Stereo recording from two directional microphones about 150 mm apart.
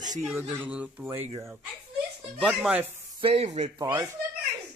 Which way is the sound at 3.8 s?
20° right (ahead or behind).